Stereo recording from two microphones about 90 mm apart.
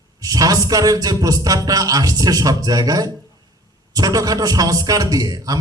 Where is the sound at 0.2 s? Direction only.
45° right (ahead or behind).